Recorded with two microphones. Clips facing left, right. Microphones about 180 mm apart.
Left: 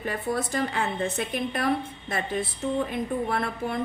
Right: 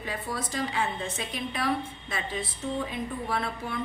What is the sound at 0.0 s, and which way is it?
A woman's voice, 55° left (ahead or behind).